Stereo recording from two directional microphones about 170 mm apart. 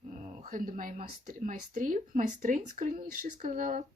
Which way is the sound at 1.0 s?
50° right (ahead or behind).